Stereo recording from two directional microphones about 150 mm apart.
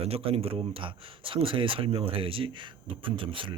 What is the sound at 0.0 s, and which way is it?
Speech, 40° right (ahead or behind).